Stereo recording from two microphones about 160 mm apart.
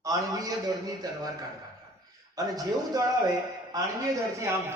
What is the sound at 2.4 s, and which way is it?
A man's voice, 25° right (ahead or behind).